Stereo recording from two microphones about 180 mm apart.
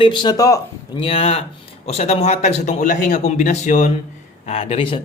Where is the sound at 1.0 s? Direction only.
30° left (ahead or behind).